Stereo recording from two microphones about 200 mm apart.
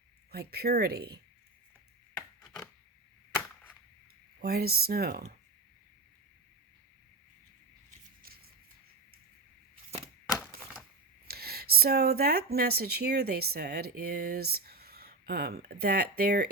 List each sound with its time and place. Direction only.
0.3 s speech: 50° right (ahead or behind)
4.4 s speech: 50° right (ahead or behind)
11.3 s speech: 50° right (ahead or behind)